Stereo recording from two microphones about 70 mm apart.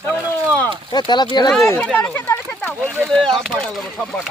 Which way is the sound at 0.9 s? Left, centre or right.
Left.